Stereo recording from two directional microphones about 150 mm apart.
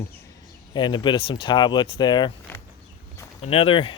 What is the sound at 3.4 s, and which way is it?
Speech, 40° left (ahead or behind).